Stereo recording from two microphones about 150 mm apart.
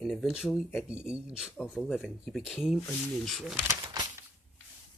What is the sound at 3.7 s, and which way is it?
Bird, 20° right (ahead or behind).